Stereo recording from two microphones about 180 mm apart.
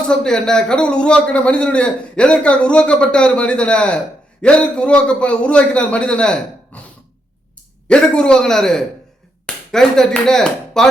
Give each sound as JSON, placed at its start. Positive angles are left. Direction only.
{"t": 0.1, "sound": "a man's voice", "side_deg": 5}
{"t": 7.9, "sound": "a man's voice", "side_deg": 5}